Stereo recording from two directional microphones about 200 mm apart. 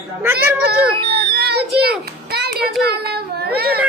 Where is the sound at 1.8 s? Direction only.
50° right (ahead or behind).